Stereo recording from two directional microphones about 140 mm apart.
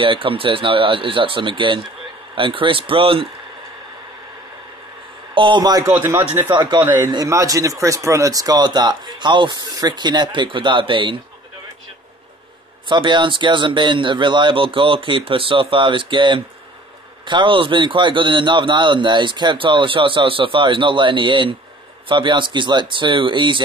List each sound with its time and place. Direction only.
0.0 s speech: 40° right (ahead or behind)
5.3 s speech: 35° right (ahead or behind)
5.9 s speech: 15° right (ahead or behind)
6.5 s speech: 30° right (ahead or behind)
12.8 s speech: 35° right (ahead or behind)